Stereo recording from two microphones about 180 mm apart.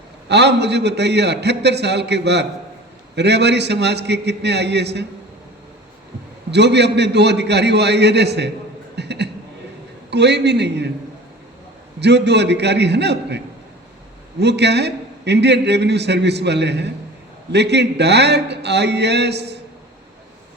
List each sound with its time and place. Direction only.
0.3 s a man's voice: 70° right (ahead or behind)
6.5 s a man's voice: 70° right (ahead or behind)
9.0 s a sound: 70° right (ahead or behind)
10.1 s a man's voice: 70° right (ahead or behind)
11.9 s a man's voice: 70° right (ahead or behind)